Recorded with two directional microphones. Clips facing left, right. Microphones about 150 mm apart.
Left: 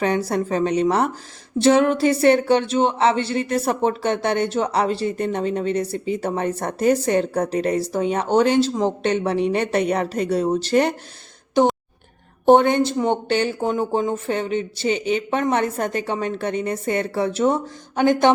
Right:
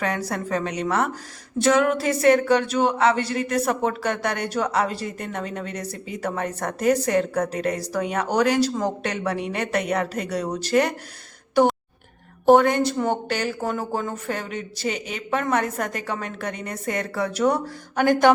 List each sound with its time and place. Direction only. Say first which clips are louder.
0.0 s a woman's voice: left 6 dB; 30° left (ahead or behind)
12.5 s speech: left 2 dB; 25° left (ahead or behind)